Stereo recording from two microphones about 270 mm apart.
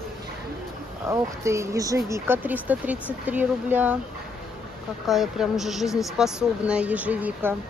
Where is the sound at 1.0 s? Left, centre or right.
Centre.